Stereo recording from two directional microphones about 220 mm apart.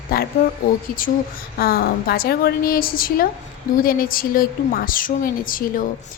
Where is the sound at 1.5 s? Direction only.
45° left (ahead or behind).